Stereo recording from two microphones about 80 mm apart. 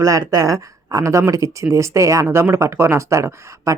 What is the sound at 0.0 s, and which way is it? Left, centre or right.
Speech, right.